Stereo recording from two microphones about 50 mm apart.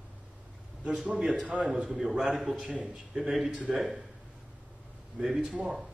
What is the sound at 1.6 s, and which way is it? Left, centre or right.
A man's voice, centre.